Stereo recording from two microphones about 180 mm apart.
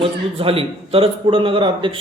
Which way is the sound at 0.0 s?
30° right (ahead or behind).